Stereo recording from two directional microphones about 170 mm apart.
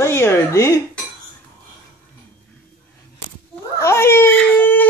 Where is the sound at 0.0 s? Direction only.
15° left (ahead or behind).